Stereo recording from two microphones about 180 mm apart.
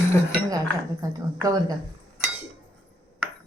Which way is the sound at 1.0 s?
20° right (ahead or behind).